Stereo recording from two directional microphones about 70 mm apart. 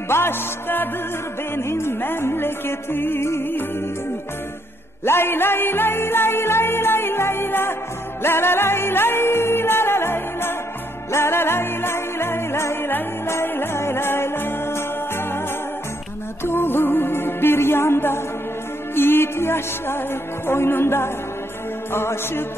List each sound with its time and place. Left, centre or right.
0.1 s music: left
5.0 s music: left
16.4 s music: left